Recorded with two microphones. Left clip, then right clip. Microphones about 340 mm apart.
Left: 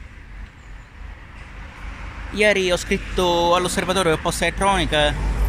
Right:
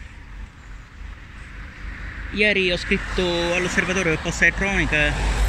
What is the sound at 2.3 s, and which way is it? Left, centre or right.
Speech, centre.